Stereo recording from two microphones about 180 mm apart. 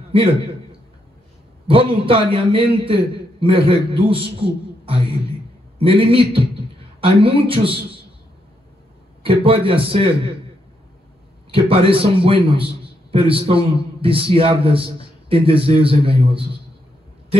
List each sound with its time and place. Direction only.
0.1 s a sound: 30° right (ahead or behind)
1.7 s a man's voice: 30° right (ahead or behind)
9.2 s a man's voice: 30° right (ahead or behind)
11.5 s a man's voice: 30° right (ahead or behind)